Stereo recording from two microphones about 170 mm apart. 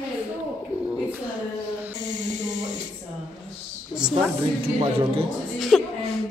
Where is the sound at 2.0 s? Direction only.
45° right (ahead or behind).